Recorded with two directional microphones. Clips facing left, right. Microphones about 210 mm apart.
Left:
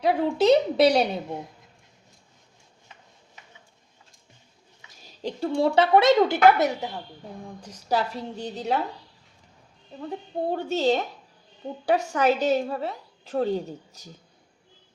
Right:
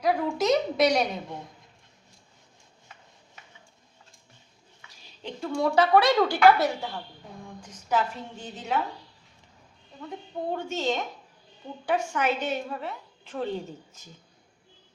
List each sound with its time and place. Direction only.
0.0 s a woman's voice: 30° left (ahead or behind)
5.2 s a woman's voice: 30° left (ahead or behind)
7.4 s a woman's voice: 35° left (ahead or behind)
10.0 s a woman's voice: 35° left (ahead or behind)